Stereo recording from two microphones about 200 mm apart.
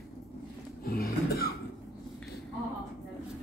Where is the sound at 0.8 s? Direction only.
50° left (ahead or behind).